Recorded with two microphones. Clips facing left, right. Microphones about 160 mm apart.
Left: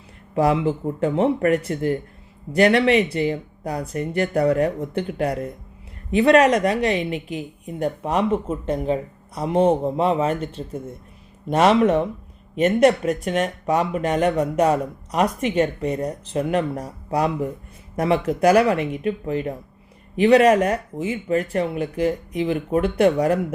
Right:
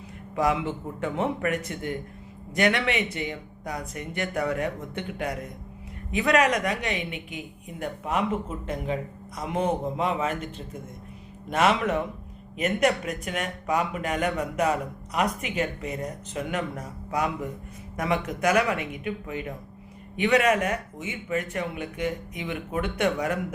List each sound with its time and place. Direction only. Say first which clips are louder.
0.3 s speech: left 6 dB; 30° left (ahead or behind)